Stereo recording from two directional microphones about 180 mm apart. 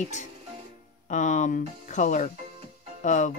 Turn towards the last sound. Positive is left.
turn(degrees=40)  # may be behind; listen again after turning